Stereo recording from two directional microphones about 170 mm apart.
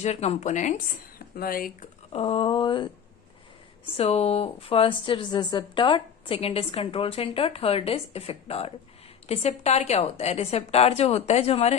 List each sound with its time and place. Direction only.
0.0 s a woman's voice: 40° left (ahead or behind)
1.4 s speech: 60° left (ahead or behind)
2.1 s speech: 30° left (ahead or behind)
3.9 s a woman's voice: 40° left (ahead or behind)